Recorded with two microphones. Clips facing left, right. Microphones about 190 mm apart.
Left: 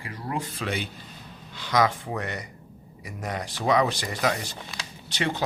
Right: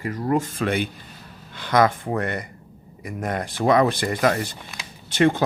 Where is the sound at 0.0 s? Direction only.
45° right (ahead or behind).